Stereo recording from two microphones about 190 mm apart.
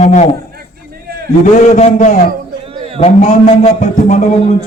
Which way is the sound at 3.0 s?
35° left (ahead or behind).